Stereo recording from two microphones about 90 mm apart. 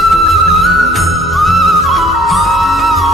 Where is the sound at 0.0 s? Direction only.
Centre (ahead or behind).